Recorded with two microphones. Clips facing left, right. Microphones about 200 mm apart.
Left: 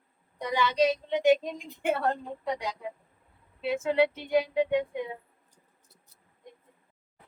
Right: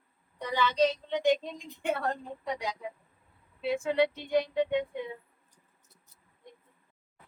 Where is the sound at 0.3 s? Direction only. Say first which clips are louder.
Left 1 dB; 10° left (ahead or behind).